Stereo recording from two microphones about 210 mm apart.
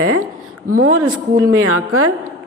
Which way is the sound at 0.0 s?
90° right.